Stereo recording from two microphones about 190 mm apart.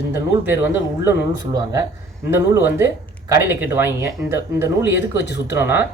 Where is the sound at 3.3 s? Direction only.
15° right (ahead or behind).